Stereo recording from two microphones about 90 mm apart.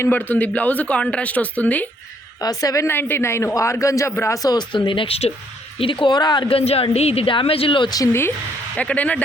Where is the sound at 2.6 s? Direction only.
35° left (ahead or behind).